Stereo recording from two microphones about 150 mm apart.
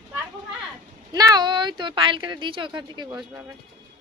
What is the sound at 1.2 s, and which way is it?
A woman's voice, 25° right (ahead or behind).